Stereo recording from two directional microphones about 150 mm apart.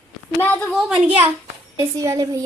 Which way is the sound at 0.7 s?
5° right (ahead or behind).